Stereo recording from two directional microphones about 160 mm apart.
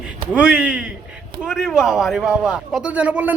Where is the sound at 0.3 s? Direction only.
5° right (ahead or behind).